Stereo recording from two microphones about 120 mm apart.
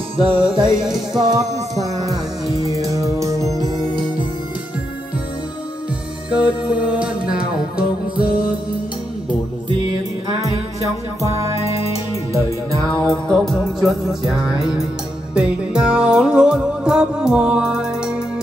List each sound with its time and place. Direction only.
0.2 s music: 50° right (ahead or behind)
0.8 s music: 5° right (ahead or behind)
1.2 s music: 35° right (ahead or behind)
6.3 s music: 10° right (ahead or behind)
13.0 s music: 5° left (ahead or behind)